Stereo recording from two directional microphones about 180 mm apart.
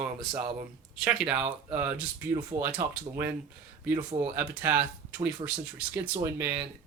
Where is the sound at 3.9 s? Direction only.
30° right (ahead or behind).